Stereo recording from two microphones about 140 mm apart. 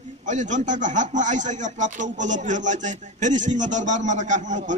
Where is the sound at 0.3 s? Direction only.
60° right (ahead or behind).